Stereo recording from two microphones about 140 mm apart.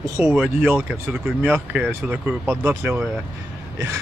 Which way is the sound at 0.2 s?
10° right (ahead or behind).